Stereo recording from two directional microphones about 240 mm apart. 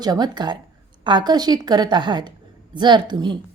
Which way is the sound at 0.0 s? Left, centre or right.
Centre.